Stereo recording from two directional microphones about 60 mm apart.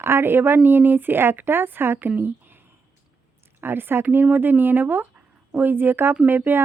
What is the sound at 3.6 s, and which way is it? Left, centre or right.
Speech, right.